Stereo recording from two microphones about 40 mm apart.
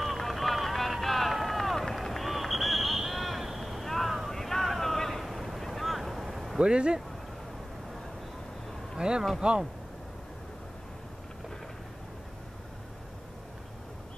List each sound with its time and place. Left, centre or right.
0.0 s run: centre
4.3 s a sound: centre
6.6 s speech: right
8.9 s speech: right